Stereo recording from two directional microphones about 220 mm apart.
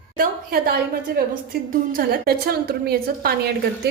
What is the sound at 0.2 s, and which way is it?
A woman's voice, 45° right (ahead or behind).